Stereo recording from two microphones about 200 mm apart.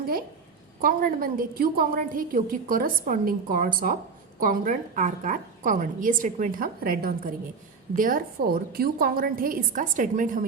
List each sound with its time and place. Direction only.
0.0 s a woman's voice: 50° right (ahead or behind)